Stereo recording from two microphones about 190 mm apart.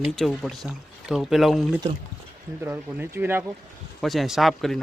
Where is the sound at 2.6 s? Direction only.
10° right (ahead or behind).